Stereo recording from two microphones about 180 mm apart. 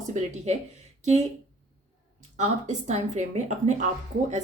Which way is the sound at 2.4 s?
40° right (ahead or behind).